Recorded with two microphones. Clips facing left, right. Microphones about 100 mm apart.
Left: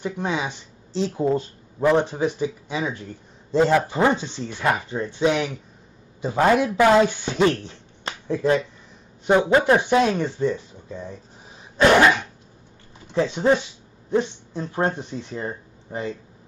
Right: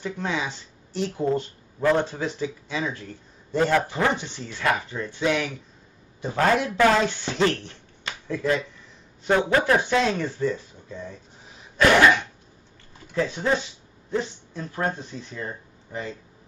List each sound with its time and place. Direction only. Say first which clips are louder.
0.0 s speech: left 2 dB; 20° left (ahead or behind)
8.0 s finger snapping: left 4 dB; 25° left (ahead or behind)
9.2 s speech: left 4 dB; 20° left (ahead or behind)
11.7 s cough: left 2 dB; 25° left (ahead or behind)
13.1 s speech: left 5 dB; 30° left (ahead or behind)